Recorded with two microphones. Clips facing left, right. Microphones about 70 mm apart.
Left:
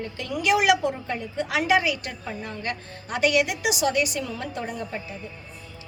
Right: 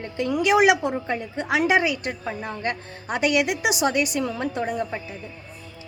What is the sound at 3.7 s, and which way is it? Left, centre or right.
Speech, right.